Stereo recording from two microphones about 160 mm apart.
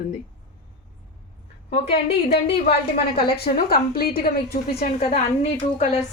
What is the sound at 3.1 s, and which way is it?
Speech, 80° left.